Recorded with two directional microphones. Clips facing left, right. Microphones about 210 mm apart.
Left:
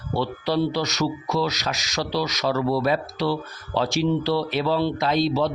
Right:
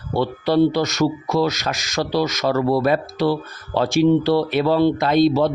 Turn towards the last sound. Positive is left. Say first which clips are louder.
# right 6 dB
turn(degrees=-50)  # may be behind; listen again after turning